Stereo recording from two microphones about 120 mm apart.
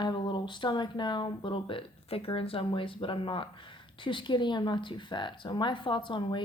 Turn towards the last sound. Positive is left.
turn(degrees=40)  # may be behind; listen again after turning